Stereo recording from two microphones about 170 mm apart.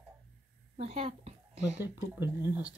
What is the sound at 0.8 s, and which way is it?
A woman's voice, 35° right (ahead or behind).